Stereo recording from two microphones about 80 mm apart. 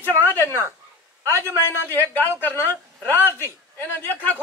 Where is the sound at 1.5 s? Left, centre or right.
Left.